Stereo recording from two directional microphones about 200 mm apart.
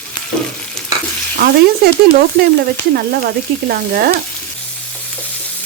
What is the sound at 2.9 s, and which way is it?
Speech, 50° right (ahead or behind).